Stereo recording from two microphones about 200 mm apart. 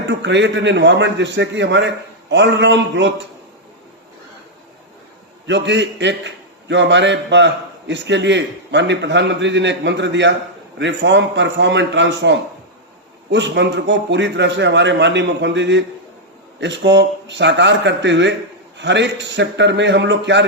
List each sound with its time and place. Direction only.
0.1 s a man's voice: 60° right (ahead or behind)
5.5 s a man's voice: 65° right (ahead or behind)